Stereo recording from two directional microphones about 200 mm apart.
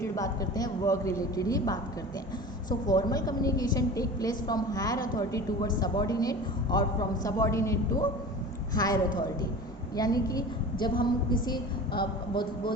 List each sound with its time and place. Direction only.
0.0 s a man's voice: 15° left (ahead or behind)